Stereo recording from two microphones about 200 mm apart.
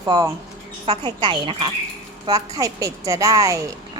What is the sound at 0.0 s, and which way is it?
Speech, 20° right (ahead or behind).